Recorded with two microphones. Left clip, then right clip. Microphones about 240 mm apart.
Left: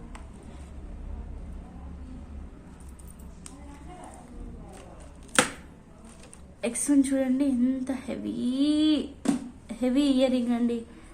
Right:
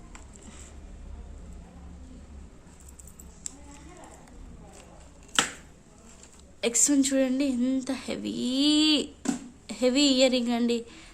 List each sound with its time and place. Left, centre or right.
6.6 s a woman's voice: right